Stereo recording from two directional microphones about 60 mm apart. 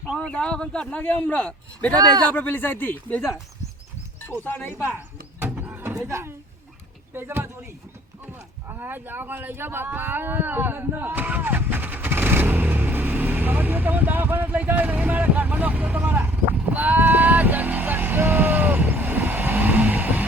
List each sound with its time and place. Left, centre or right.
0.3 s speech: centre
1.0 s speech: left
1.4 s speech: centre
2.0 s speech: right
2.3 s speech: left
4.3 s speech: left
5.5 s a sound: right
6.0 s speech: right
7.1 s speech: right
8.6 s speech: right
14.9 s vehicle: right